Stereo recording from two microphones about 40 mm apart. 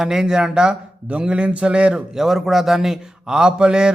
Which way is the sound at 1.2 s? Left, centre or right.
Right.